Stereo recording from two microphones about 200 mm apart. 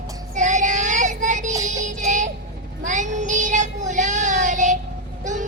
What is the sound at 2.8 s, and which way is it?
Child singing, 40° right (ahead or behind).